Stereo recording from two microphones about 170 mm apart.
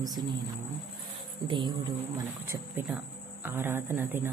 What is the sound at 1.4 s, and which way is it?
Speech, 30° right (ahead or behind).